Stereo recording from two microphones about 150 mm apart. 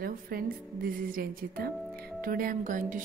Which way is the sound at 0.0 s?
75° right (ahead or behind).